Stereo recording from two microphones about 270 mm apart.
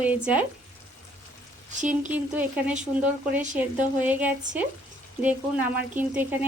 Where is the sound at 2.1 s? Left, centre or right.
Centre.